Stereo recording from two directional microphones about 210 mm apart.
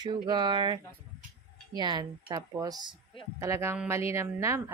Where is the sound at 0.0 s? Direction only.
20° right (ahead or behind).